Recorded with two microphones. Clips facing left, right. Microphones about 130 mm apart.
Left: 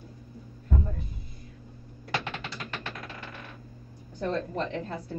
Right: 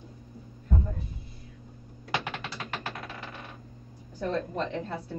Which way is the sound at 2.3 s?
30° right (ahead or behind).